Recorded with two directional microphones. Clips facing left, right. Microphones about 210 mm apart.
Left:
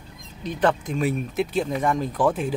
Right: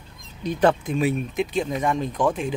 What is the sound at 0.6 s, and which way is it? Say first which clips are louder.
Speech: right 2 dB; 10° right (ahead or behind).